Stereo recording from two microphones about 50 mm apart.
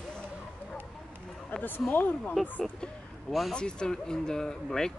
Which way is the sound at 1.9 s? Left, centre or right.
Left.